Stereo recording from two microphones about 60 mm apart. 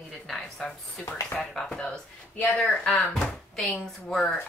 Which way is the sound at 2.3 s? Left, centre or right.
Left.